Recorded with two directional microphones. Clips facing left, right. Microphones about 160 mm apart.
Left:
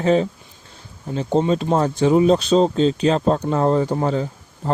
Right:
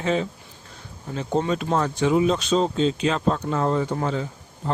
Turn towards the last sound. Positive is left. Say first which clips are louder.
# left 5 dB
turn(degrees=35)  # may be behind; listen again after turning